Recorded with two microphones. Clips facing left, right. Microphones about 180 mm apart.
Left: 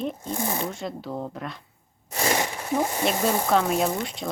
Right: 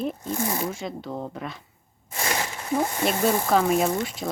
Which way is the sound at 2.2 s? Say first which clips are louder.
Left 4 dB; 25° left (ahead or behind).